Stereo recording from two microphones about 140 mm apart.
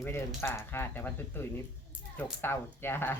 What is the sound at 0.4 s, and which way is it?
Speech, 15° left (ahead or behind).